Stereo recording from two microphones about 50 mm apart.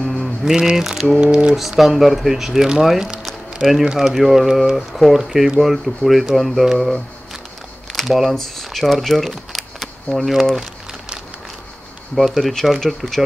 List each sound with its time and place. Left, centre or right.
0.0 s camera: centre
0.5 s speech: centre
1.2 s speech: right
1.5 s speech: centre
9.3 s camera: centre
12.2 s speech: centre